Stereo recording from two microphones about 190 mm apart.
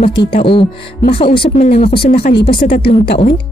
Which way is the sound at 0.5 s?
25° left (ahead or behind).